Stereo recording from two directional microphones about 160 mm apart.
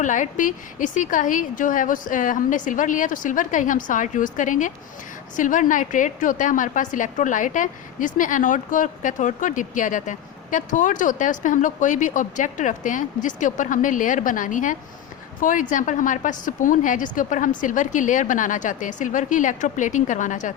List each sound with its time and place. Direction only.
0.0 s a woman's voice: 50° left (ahead or behind)